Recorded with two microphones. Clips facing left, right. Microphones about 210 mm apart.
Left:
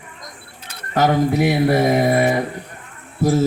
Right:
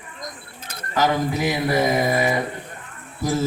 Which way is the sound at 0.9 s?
65° left (ahead or behind).